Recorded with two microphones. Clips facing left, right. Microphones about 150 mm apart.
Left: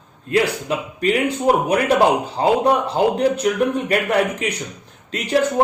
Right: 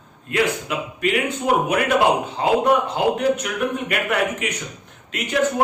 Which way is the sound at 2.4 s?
35° left (ahead or behind).